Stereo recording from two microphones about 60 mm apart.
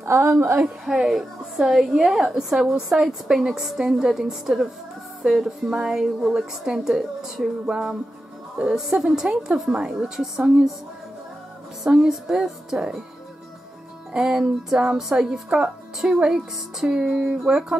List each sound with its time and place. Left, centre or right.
0.0 s a woman's voice: right
0.6 s a woman's voice: centre
11.8 s a woman's voice: centre
14.1 s a woman's voice: centre